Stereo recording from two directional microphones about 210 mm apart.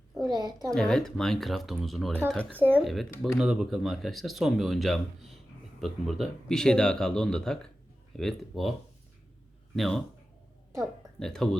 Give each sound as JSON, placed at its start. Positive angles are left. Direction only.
{"t": 0.3, "sound": "a woman's voice", "side_deg": -20}
{"t": 0.7, "sound": "speech", "side_deg": 5}
{"t": 2.6, "sound": "speech", "side_deg": -10}
{"t": 2.8, "sound": "speech", "side_deg": 0}
{"t": 9.7, "sound": "speech", "side_deg": 0}